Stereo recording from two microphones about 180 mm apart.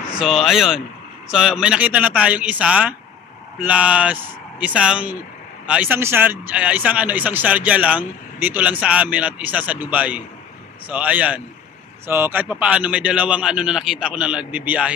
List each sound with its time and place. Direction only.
0.2 s speech: centre (ahead or behind)